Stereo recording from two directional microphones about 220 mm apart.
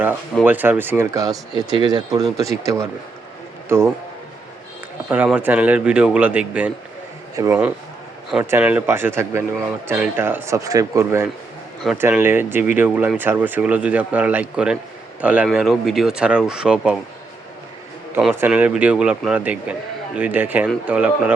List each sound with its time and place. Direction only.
0.4 s speech: 10° right (ahead or behind)
5.0 s speech: 5° right (ahead or behind)
18.1 s speech: 5° right (ahead or behind)